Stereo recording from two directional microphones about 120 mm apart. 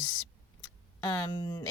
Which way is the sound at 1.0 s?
30° left (ahead or behind).